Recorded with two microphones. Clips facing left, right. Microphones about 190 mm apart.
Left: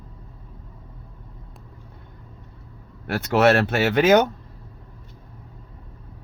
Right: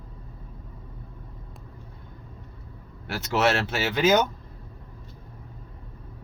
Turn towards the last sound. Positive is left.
turn(degrees=65)  # may be behind; listen again after turning